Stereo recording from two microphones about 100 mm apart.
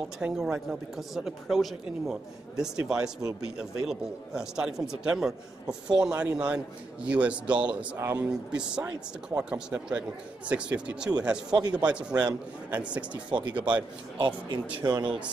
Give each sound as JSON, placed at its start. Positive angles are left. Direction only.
{"t": 0.2, "sound": "speech", "side_deg": -5}
{"t": 13.3, "sound": "speech", "side_deg": -50}
{"t": 13.6, "sound": "speech", "side_deg": -15}
{"t": 14.1, "sound": "speech", "side_deg": -55}
{"t": 14.8, "sound": "speech", "side_deg": -40}